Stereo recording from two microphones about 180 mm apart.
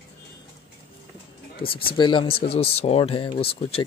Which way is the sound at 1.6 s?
30° left (ahead or behind).